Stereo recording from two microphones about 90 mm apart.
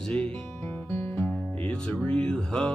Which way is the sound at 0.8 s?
30° left (ahead or behind).